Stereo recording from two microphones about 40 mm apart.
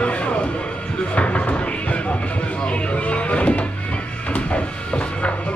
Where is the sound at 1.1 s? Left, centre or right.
Left.